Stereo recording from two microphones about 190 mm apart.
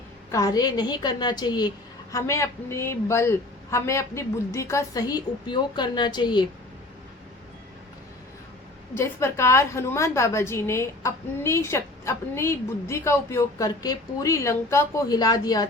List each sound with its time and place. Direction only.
0.3 s a woman's voice: 20° left (ahead or behind)
9.0 s a woman's voice: 15° left (ahead or behind)